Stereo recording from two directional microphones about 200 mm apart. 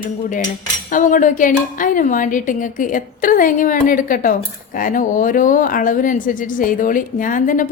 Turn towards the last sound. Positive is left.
turn(degrees=40)  # may be behind; listen again after turning